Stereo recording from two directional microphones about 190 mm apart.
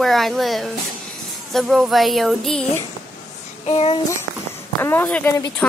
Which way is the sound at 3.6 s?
35° left (ahead or behind).